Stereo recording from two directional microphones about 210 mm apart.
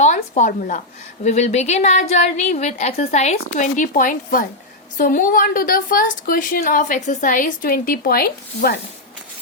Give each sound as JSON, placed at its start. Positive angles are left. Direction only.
{"t": 0.0, "sound": "a woman's voice", "side_deg": 35}